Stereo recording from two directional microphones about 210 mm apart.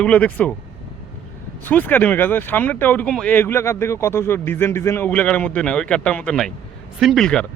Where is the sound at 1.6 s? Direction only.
10° left (ahead or behind).